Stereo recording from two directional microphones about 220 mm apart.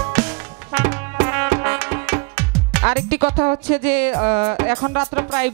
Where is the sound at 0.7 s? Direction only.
15° right (ahead or behind).